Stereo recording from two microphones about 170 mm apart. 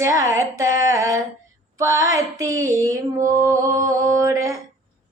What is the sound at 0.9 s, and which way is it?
Female singing, 20° right (ahead or behind).